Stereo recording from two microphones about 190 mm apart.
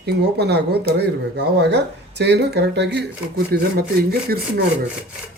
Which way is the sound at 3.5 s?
55° right (ahead or behind).